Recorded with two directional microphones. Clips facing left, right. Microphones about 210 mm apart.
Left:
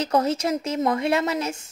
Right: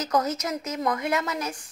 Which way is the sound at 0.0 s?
30° left (ahead or behind).